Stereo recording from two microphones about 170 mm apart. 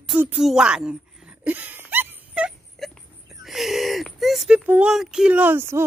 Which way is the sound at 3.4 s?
Centre (ahead or behind).